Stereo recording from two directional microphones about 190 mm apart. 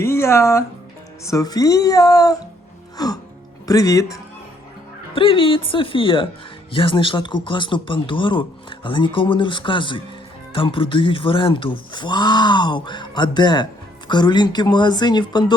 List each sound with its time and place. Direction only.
0.0 s speech: 15° left (ahead or behind)
5.1 s speech: 30° left (ahead or behind)